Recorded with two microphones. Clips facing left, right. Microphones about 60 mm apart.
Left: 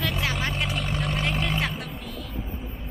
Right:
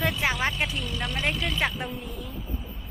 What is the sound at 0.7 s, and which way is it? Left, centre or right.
Vehicle, left.